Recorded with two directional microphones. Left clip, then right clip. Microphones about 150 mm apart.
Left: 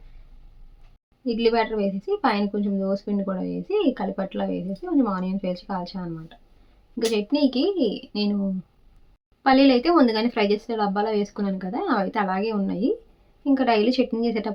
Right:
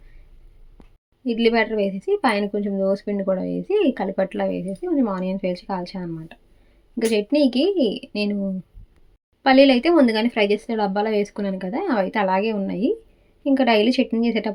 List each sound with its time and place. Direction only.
1.2 s speech: 20° right (ahead or behind)
9.4 s speech: 20° right (ahead or behind)